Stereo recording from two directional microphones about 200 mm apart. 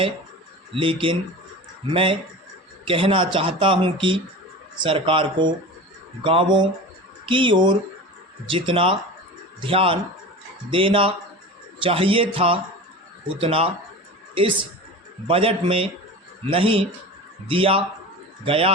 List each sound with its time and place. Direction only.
0.7 s speech: 25° right (ahead or behind)